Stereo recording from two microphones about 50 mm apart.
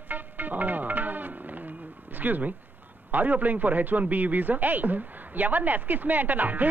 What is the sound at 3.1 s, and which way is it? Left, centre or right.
A man's voice, right.